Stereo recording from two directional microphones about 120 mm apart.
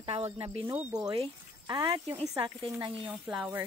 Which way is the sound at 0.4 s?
50° right (ahead or behind).